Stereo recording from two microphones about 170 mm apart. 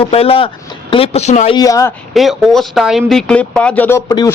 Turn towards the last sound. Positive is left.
turn(degrees=25)  # may be behind; listen again after turning